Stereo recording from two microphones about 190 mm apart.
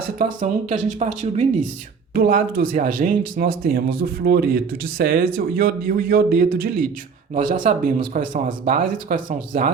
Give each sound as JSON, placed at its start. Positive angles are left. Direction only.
{"t": 0.3, "sound": "speech", "side_deg": -40}
{"t": 2.1, "sound": "speech", "side_deg": -50}